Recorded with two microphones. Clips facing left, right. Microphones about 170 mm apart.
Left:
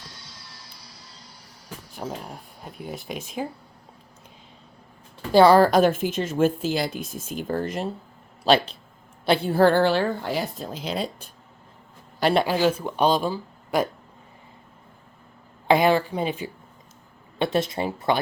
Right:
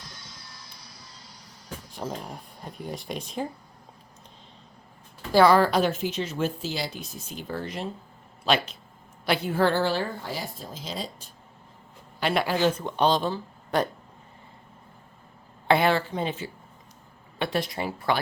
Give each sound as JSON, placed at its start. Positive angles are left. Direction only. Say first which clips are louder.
{"t": 2.0, "sound": "speech", "louder": "left 1 dB", "side_deg": 5}
{"t": 5.3, "sound": "speech", "louder": "left 3 dB", "side_deg": 25}
{"t": 5.5, "sound": "speech", "louder": "left 5 dB", "side_deg": 45}
{"t": 8.4, "sound": "a woman's voice", "louder": "left 5 dB", "side_deg": 35}
{"t": 9.7, "sound": "speech", "louder": "left 5 dB", "side_deg": 65}
{"t": 12.2, "sound": "speech", "louder": "left 5 dB", "side_deg": 30}
{"t": 12.5, "sound": "speech", "louder": "left 2 dB", "side_deg": 10}
{"t": 15.6, "sound": "speech", "louder": "left 3 dB", "side_deg": 15}